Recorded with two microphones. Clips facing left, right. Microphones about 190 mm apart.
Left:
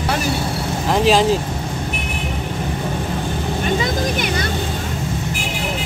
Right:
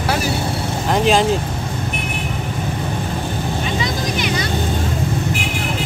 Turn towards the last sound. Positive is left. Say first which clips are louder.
# left 1 dB
turn(degrees=50)  # may be behind; listen again after turning